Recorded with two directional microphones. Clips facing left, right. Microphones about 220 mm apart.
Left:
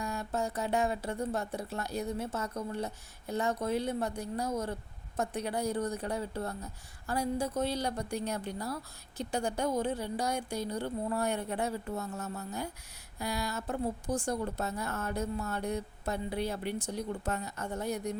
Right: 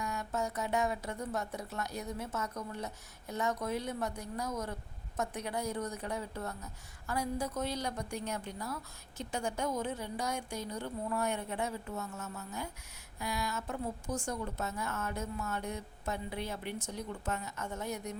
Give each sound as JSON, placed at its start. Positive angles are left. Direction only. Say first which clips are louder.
{"t": 0.0, "sound": "a woman's voice", "louder": "left 2 dB", "side_deg": 30}